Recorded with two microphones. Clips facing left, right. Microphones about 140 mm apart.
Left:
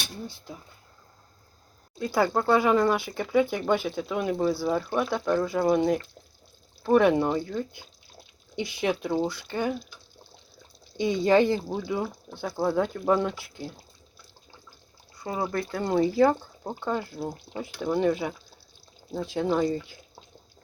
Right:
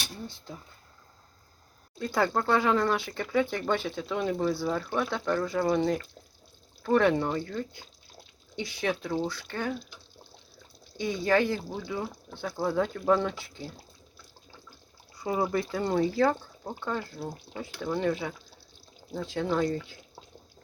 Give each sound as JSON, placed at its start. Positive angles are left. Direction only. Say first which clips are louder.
{"t": 0.3, "sound": "speech", "louder": "left 2 dB", "side_deg": 5}
{"t": 2.0, "sound": "speech", "louder": "left 3 dB", "side_deg": 5}
{"t": 10.9, "sound": "speech", "louder": "left 5 dB", "side_deg": 20}
{"t": 11.9, "sound": "speech", "louder": "left 4 dB", "side_deg": 10}
{"t": 15.2, "sound": "speech", "louder": "right 1 dB", "side_deg": -5}